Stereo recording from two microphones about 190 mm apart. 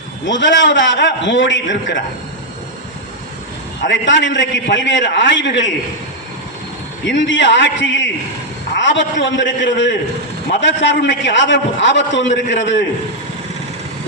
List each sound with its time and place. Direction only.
0.3 s a man's voice: 70° left (ahead or behind)
3.8 s a man's voice: 75° left (ahead or behind)
7.0 s a man's voice: 70° left (ahead or behind)